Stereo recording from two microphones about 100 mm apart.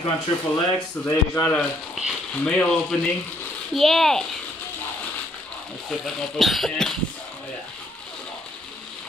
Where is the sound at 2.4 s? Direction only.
10° left (ahead or behind).